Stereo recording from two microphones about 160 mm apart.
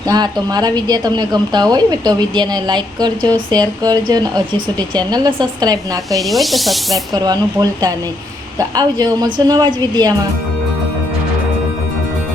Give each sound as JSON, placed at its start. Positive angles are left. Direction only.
{"t": 0.1, "sound": "a woman's voice", "side_deg": -25}
{"t": 6.2, "sound": "snake", "side_deg": 0}
{"t": 7.1, "sound": "a woman's voice", "side_deg": -25}